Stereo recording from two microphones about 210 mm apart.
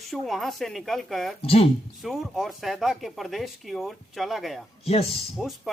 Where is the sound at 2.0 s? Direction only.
Centre (ahead or behind).